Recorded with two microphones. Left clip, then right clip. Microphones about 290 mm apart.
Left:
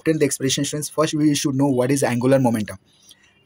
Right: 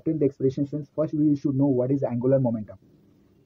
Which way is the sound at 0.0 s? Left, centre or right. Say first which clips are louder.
Left 4 dB; left.